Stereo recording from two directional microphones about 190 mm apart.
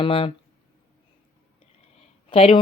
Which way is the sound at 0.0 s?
30° left (ahead or behind).